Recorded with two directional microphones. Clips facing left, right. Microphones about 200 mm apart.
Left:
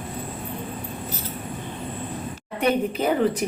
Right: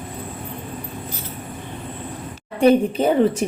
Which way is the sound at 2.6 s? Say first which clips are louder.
Right 7 dB; 30° right (ahead or behind).